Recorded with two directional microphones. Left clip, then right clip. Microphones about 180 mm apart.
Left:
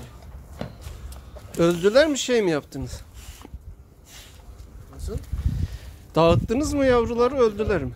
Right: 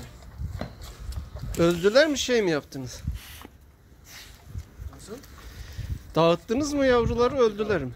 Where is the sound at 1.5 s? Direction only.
Centre (ahead or behind).